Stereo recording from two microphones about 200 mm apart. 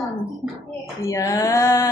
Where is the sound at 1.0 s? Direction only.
15° left (ahead or behind).